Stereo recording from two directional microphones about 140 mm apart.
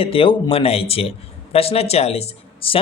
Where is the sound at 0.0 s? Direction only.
40° left (ahead or behind).